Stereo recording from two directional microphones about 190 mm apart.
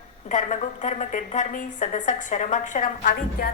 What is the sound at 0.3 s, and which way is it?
A woman's voice, 40° left (ahead or behind).